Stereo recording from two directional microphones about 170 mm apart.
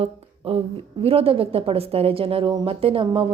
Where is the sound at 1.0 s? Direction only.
35° right (ahead or behind).